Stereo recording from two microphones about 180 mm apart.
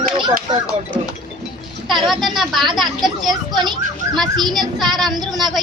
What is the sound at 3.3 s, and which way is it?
Speech, 25° right (ahead or behind).